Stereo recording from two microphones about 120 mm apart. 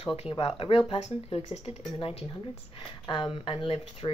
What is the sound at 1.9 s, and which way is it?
Speech, 50° left (ahead or behind).